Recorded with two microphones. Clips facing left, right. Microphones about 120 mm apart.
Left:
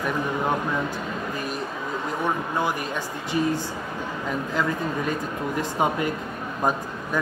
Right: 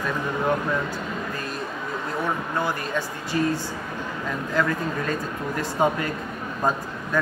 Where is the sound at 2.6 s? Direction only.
15° left (ahead or behind).